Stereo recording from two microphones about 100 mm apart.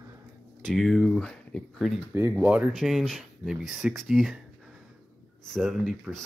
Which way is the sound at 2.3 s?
10° right (ahead or behind).